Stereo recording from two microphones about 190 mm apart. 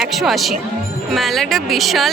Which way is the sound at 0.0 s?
Centre (ahead or behind).